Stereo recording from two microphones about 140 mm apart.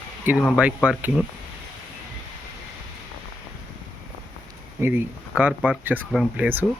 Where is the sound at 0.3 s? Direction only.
5° right (ahead or behind).